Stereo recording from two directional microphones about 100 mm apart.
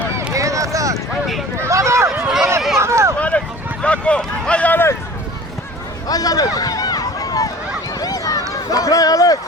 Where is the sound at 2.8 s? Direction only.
30° right (ahead or behind).